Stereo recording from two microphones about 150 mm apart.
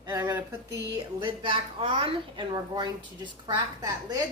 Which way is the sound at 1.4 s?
35° right (ahead or behind).